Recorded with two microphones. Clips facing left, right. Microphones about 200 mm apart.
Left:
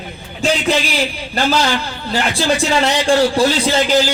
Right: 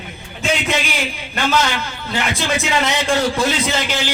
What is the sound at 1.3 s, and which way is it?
Speech, 35° left (ahead or behind).